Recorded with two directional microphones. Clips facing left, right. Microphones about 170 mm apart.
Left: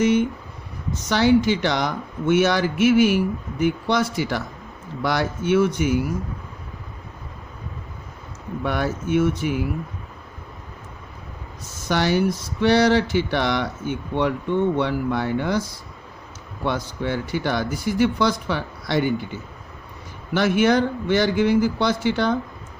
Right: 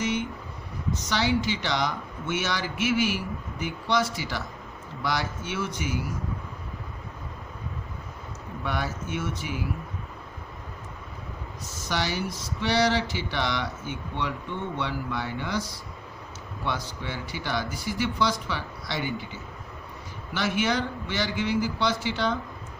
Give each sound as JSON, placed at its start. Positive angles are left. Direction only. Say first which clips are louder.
{"t": 0.0, "sound": "a man's voice", "louder": "left 10 dB", "side_deg": 50}
{"t": 8.6, "sound": "a man's voice", "louder": "left 7 dB", "side_deg": 55}
{"t": 11.9, "sound": "a man's voice", "louder": "left 9 dB", "side_deg": 55}